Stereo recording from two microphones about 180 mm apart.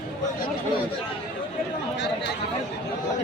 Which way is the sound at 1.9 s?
70° left (ahead or behind).